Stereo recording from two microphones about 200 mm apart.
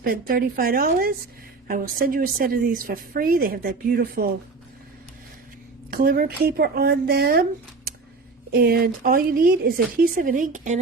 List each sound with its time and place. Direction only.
0.0 s a woman's voice: 50° right (ahead or behind)
5.9 s a woman's voice: 45° right (ahead or behind)
8.5 s a woman's voice: 50° right (ahead or behind)